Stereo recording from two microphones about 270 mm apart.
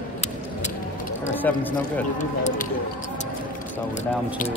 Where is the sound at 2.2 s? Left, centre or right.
Left.